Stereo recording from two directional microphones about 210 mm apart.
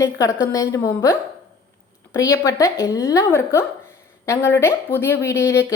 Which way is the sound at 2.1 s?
15° left (ahead or behind).